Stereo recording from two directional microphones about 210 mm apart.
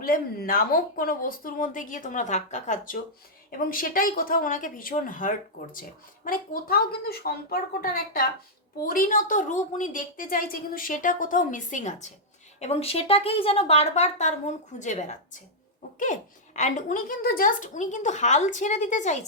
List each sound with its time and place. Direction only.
0.0 s a woman's voice: 40° left (ahead or behind)
16.6 s a woman's voice: 35° left (ahead or behind)